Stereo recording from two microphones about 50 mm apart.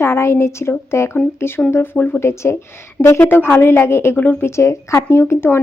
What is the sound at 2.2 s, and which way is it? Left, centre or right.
Speech, left.